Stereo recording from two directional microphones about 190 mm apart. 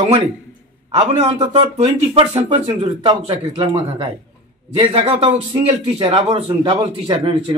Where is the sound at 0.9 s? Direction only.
25° right (ahead or behind).